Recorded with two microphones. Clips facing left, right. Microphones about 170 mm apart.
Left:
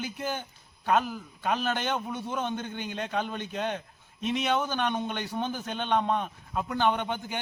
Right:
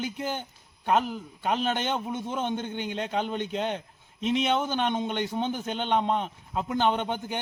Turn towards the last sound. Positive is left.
turn(degrees=-20)  # may be behind; listen again after turning